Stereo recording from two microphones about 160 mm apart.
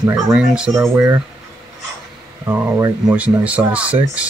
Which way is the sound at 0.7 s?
15° right (ahead or behind).